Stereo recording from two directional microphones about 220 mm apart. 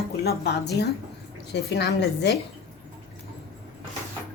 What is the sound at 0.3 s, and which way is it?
A woman's voice, 50° left (ahead or behind).